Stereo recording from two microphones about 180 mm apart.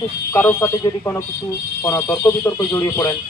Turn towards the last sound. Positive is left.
turn(degrees=15)  # may be behind; listen again after turning